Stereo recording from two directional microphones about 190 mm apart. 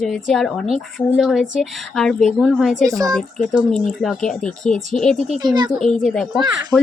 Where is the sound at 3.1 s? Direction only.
Centre (ahead or behind).